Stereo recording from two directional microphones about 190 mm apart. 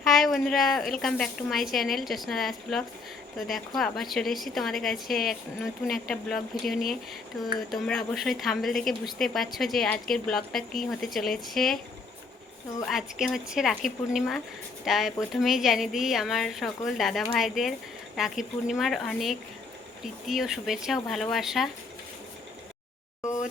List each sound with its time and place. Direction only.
0.0 s a woman's voice: centre (ahead or behind)
12.8 s a woman's voice: centre (ahead or behind)